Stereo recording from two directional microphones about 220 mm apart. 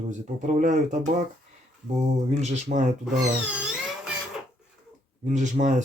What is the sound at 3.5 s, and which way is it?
Music, 5° right (ahead or behind).